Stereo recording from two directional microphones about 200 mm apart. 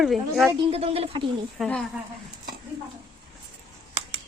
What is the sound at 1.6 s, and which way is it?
Speech, 5° left (ahead or behind).